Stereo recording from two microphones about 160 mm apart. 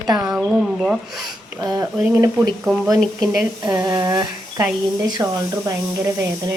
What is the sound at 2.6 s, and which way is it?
Speech, centre (ahead or behind).